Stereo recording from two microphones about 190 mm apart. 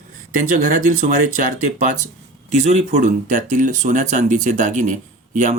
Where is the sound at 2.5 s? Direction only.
35° right (ahead or behind).